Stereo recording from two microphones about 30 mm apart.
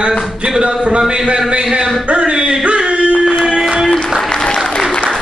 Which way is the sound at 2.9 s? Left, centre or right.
Right.